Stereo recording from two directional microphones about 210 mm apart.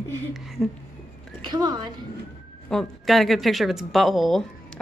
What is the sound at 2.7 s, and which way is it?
A woman's voice, centre (ahead or behind).